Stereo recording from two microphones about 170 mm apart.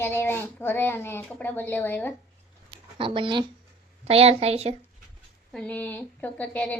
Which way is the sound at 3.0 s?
30° right (ahead or behind).